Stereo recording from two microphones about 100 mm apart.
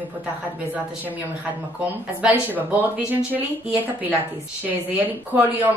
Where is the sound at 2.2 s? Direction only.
15° right (ahead or behind).